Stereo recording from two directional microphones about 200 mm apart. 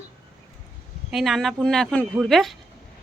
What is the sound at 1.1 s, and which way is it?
A woman's voice, centre (ahead or behind).